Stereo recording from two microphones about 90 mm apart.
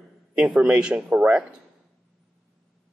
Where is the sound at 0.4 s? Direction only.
15° right (ahead or behind).